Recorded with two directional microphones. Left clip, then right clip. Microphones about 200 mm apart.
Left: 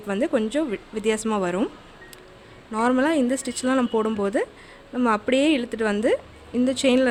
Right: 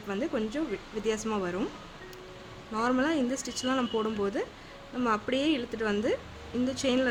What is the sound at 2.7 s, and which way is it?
Speech, 40° left (ahead or behind).